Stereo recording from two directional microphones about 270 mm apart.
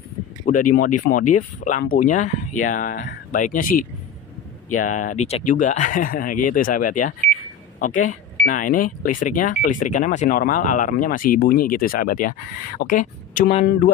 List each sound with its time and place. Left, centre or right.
0.4 s speech: left